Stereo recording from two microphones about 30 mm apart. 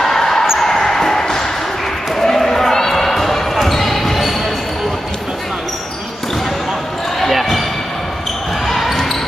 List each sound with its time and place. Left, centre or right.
0.0 s a sound: centre
0.6 s music: centre
2.1 s basketball bounce: centre
7.2 s basketball bounce: centre
8.8 s basketball bounce: centre